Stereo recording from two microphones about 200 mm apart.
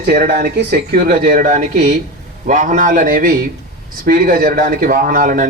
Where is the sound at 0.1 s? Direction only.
50° right (ahead or behind).